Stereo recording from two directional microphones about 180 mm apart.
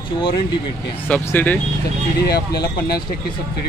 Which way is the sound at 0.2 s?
25° left (ahead or behind).